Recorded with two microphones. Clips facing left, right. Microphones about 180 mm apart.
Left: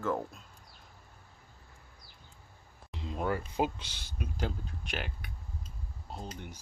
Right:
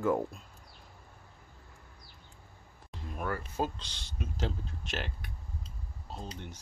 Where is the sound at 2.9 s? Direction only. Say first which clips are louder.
Left 3 dB; 20° left (ahead or behind).